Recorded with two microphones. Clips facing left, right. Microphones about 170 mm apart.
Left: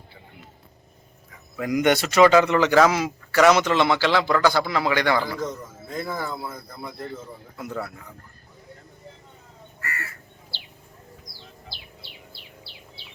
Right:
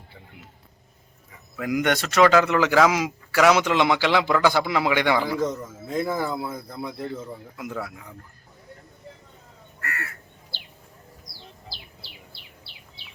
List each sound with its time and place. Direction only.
1.5 s speech: centre (ahead or behind)
5.9 s speech: 20° right (ahead or behind)
7.5 s speech: 10° right (ahead or behind)
9.8 s crow: 60° right (ahead or behind)